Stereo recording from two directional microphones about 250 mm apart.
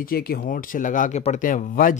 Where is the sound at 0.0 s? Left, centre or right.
Left.